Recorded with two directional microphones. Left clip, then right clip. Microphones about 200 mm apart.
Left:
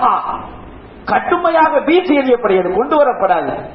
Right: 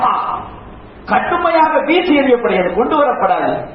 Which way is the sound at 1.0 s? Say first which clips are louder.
Even; 40° left (ahead or behind).